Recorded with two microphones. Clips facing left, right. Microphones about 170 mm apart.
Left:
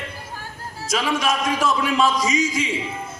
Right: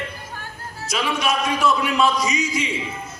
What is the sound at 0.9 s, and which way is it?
Speech, 45° left (ahead or behind).